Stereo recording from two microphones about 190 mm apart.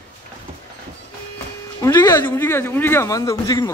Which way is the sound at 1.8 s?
20° left (ahead or behind).